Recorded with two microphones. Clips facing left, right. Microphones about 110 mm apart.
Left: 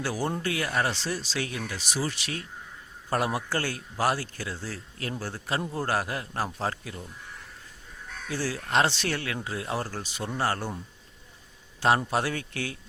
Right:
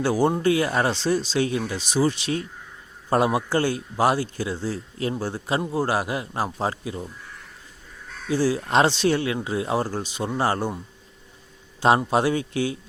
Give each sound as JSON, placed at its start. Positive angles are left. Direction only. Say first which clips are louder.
{"t": 0.0, "sound": "a man's voice", "louder": "right 9 dB", "side_deg": -25}
{"t": 8.3, "sound": "a man's voice", "louder": "right 7 dB", "side_deg": -20}
{"t": 11.8, "sound": "a man's voice", "louder": "right 5 dB", "side_deg": -20}